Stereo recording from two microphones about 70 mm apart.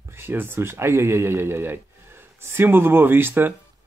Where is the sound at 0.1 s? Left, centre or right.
Right.